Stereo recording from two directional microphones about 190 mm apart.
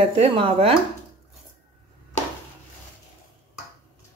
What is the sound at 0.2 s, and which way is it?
Speech, 30° right (ahead or behind).